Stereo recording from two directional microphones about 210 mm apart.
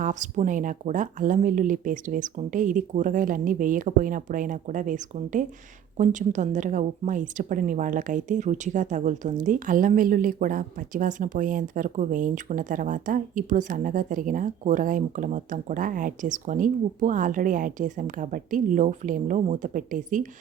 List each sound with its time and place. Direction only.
0.0 s a woman's voice: 35° right (ahead or behind)